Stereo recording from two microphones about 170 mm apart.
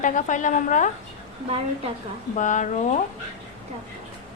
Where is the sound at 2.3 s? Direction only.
45° left (ahead or behind).